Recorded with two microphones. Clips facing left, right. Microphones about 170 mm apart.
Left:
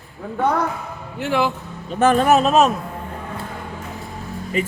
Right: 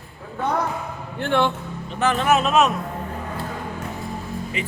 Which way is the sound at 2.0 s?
45° left (ahead or behind).